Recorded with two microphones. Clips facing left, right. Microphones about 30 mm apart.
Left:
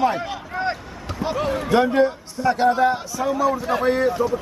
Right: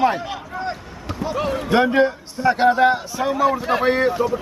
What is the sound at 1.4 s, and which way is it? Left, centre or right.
Speech, centre.